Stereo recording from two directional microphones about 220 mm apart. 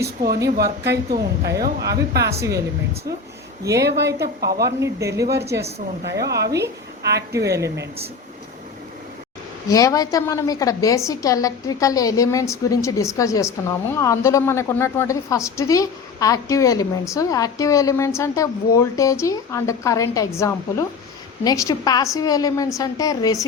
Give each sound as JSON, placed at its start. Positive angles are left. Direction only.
{"t": 0.0, "sound": "speech", "side_deg": -45}
{"t": 3.8, "sound": "speech", "side_deg": -50}
{"t": 4.8, "sound": "speech", "side_deg": -15}
{"t": 6.1, "sound": "speech", "side_deg": -50}
{"t": 7.3, "sound": "speech", "side_deg": -15}
{"t": 9.6, "sound": "a woman's voice", "side_deg": 15}